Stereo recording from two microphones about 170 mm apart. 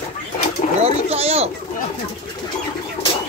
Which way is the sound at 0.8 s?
35° right (ahead or behind).